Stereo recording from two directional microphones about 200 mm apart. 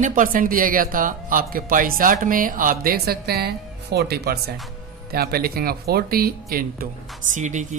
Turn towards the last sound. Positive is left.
turn(degrees=-40)  # may be behind; listen again after turning